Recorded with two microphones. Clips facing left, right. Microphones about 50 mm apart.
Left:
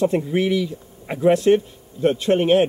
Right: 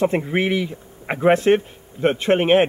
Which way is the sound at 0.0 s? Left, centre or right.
Right.